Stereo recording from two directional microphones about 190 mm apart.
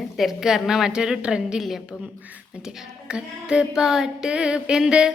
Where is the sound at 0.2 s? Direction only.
Centre (ahead or behind).